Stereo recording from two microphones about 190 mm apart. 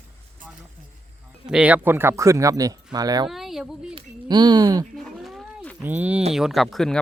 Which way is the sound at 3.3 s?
Centre (ahead or behind).